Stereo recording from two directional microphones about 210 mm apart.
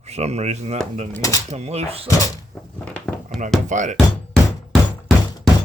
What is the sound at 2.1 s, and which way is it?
Speech, 15° left (ahead or behind).